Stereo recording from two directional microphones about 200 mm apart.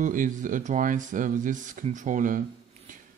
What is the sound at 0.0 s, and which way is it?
Speech, 40° right (ahead or behind).